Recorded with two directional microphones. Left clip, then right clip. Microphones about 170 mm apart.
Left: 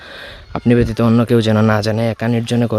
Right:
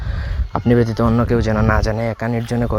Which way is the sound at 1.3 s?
50° left (ahead or behind).